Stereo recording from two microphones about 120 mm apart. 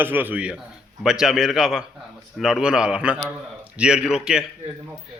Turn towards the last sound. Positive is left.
turn(degrees=-5)  # may be behind; listen again after turning